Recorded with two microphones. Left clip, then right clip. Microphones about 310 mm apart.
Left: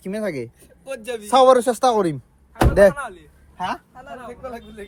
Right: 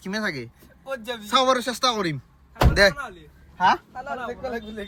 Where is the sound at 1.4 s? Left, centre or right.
Left.